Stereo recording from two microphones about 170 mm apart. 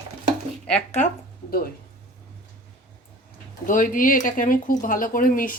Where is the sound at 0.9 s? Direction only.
45° left (ahead or behind).